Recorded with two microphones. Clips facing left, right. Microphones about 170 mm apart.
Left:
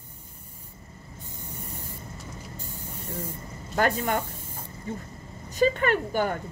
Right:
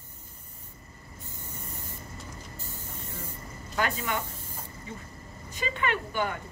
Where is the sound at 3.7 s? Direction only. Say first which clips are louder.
Left 5 dB; 45° left (ahead or behind).